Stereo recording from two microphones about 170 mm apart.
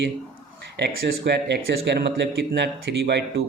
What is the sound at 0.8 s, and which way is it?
Speech, 75° right (ahead or behind).